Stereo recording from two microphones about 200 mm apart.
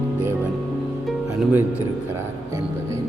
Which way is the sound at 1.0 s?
5° right (ahead or behind).